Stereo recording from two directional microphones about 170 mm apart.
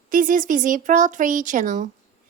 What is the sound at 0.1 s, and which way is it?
A woman's voice, 55° right (ahead or behind).